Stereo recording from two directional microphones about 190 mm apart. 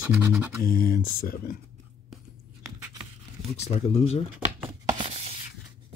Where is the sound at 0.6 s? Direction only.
50° left (ahead or behind).